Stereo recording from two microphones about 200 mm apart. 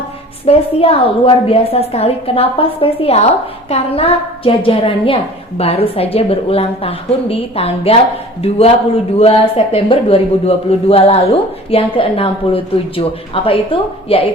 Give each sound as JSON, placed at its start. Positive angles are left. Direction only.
{"t": 0.4, "sound": "a man's voice", "side_deg": 30}